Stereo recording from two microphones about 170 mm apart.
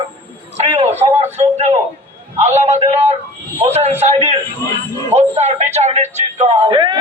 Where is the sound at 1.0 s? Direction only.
40° right (ahead or behind).